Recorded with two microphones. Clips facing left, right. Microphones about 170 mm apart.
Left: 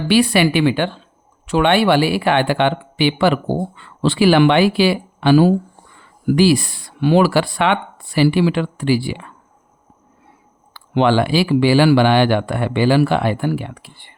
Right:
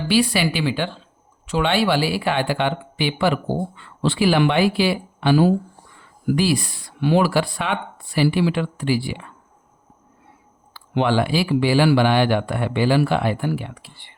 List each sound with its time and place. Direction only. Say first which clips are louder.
0.1 s speech: left 5 dB; 65° left (ahead or behind); by 9.3 s 85° left
10.8 s speech: left 4 dB; 85° left; by 14.1 s 60° left (ahead or behind)